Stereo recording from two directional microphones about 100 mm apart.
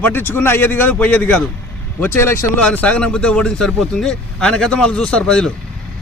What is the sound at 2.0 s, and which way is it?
Speech, 25° left (ahead or behind).